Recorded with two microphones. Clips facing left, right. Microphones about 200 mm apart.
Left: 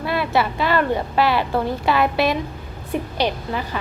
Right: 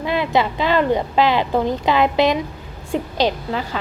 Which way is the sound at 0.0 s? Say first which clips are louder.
Right 2 dB; 20° right (ahead or behind).